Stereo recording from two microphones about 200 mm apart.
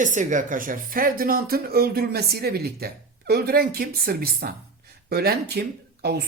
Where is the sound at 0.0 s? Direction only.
40° right (ahead or behind).